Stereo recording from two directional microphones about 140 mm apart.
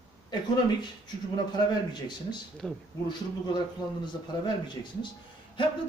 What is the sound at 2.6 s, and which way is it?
Speech, centre (ahead or behind).